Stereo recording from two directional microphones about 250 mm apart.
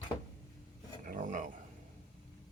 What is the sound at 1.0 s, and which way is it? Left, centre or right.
Speech, right.